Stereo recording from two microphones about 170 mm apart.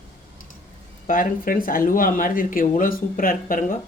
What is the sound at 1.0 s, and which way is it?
Speech, 55° left (ahead or behind).